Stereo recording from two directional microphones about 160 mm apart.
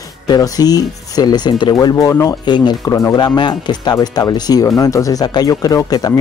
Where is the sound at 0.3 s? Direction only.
25° left (ahead or behind).